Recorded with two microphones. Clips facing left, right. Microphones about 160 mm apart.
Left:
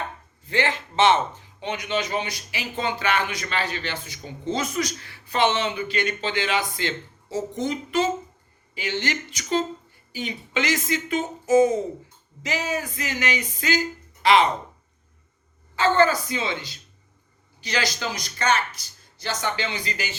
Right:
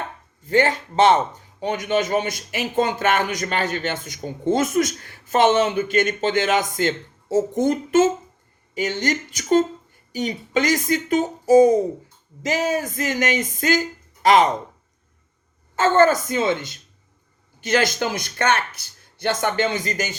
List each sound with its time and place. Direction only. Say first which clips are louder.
0.4 s a woman's voice: right 6 dB; 45° right (ahead or behind)
15.7 s speech: right 4 dB; 45° right (ahead or behind)